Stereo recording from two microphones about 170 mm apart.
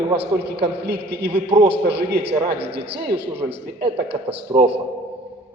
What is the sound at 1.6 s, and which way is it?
Speech, 80° right.